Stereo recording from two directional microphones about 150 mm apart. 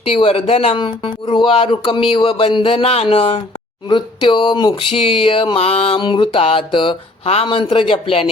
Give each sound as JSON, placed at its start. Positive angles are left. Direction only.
{"t": 0.0, "sound": "speech", "side_deg": 35}